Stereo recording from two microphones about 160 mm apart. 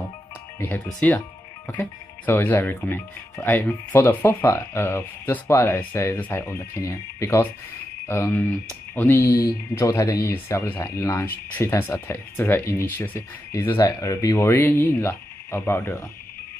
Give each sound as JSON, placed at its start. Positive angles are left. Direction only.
{"t": 0.6, "sound": "speech", "side_deg": 10}